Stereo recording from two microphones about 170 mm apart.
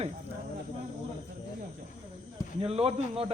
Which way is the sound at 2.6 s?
35° right (ahead or behind).